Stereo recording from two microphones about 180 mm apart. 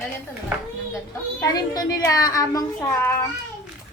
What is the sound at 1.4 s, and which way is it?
A woman's voice, 20° left (ahead or behind).